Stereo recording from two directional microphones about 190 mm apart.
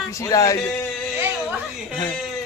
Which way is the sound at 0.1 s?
15° left (ahead or behind).